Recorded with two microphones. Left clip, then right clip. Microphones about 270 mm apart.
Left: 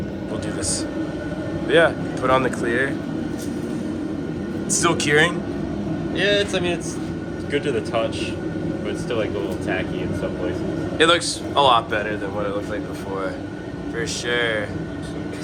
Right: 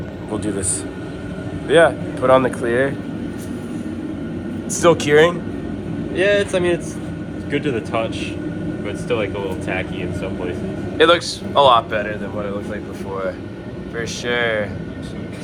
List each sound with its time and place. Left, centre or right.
1.7 s speech: centre
4.8 s speech: centre
6.1 s speech: right
10.9 s speech: centre
14.3 s speech: centre